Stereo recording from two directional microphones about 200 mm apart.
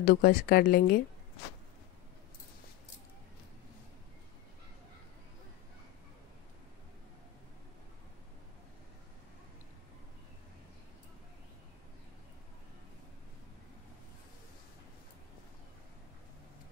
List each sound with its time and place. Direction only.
0.0 s speech: 45° left (ahead or behind)